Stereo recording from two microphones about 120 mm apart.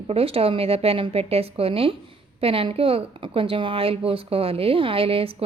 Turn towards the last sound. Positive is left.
turn(degrees=-50)  # may be behind; listen again after turning